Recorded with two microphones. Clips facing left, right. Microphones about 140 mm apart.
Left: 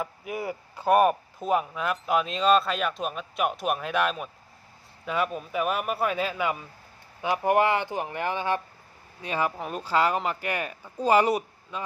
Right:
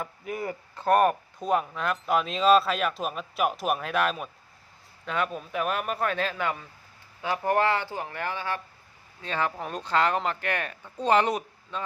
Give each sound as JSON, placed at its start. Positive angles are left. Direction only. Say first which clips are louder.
{"t": 0.0, "sound": "speech", "louder": "left 1 dB", "side_deg": 5}